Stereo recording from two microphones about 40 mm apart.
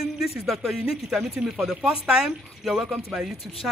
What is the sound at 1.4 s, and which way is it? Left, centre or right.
Speech, centre.